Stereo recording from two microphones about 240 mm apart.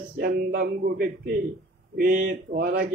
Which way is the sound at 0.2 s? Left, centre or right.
Right.